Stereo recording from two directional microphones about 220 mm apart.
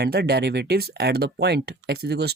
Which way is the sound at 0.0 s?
50° right (ahead or behind).